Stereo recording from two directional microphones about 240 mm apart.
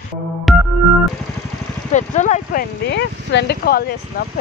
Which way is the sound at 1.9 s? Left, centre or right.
Left.